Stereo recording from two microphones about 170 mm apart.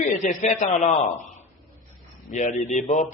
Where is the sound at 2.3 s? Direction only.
45° left (ahead or behind).